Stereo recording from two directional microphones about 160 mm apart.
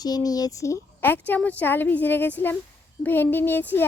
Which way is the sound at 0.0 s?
25° left (ahead or behind).